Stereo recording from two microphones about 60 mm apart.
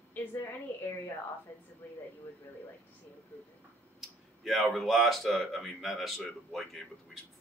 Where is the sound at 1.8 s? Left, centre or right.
Left.